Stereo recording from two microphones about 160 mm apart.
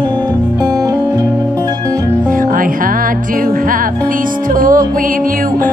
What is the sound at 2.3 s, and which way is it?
Music, 60° right (ahead or behind).